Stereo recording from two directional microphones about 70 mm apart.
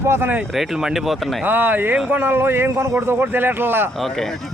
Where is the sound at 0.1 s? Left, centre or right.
Right.